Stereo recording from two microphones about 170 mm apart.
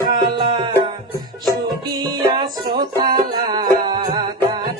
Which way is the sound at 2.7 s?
25° right (ahead or behind).